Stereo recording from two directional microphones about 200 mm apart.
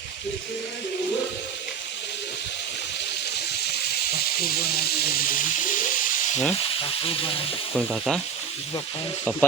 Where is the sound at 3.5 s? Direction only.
55° left (ahead or behind).